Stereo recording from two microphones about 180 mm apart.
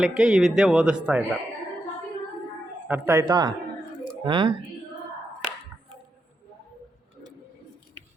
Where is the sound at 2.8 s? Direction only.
10° right (ahead or behind).